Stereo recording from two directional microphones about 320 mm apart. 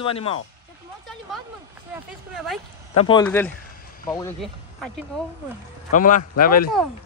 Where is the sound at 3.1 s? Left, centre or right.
Centre.